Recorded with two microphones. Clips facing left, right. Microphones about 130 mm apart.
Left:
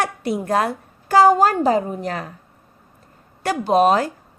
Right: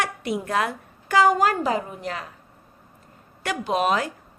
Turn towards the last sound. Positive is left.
turn(degrees=35)  # may be behind; listen again after turning